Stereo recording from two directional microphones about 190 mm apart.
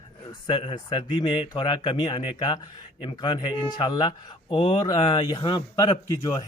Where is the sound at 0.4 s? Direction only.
25° left (ahead or behind).